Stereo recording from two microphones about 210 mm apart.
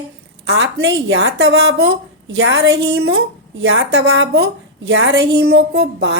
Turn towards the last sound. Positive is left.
turn(degrees=-55)  # may be behind; listen again after turning